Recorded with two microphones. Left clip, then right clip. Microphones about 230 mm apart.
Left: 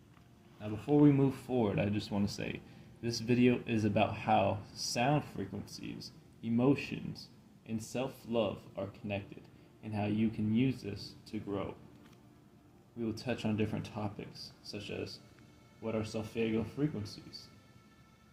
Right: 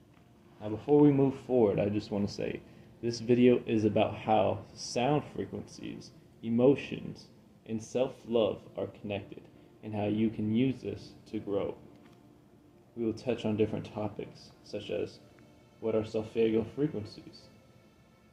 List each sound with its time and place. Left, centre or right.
0.6 s speech: left
13.0 s speech: left